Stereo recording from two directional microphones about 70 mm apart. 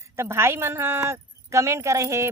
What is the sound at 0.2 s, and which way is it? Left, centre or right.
A woman's voice, right.